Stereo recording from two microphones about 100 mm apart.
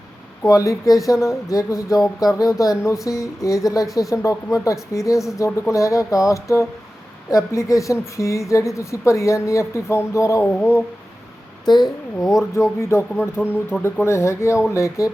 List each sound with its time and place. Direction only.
0.4 s a woman's voice: 35° left (ahead or behind)
11.6 s a child's voice: 45° left (ahead or behind)
12.5 s a woman's voice: 30° left (ahead or behind)